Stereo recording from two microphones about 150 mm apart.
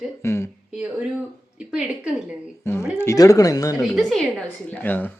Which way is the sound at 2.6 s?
20° left (ahead or behind).